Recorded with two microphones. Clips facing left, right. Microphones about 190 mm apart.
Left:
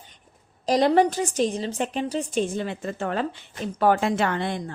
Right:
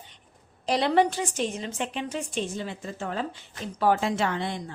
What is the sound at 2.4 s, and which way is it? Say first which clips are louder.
Speech: left 7 dB; 55° left (ahead or behind).